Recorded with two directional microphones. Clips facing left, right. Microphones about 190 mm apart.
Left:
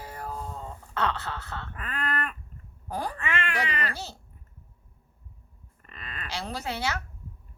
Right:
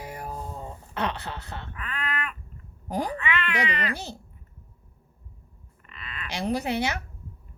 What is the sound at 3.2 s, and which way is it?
Speech, 45° left (ahead or behind).